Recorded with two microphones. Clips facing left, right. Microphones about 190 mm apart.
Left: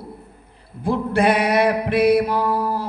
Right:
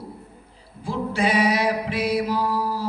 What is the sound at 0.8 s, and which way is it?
Mantra, 60° left (ahead or behind).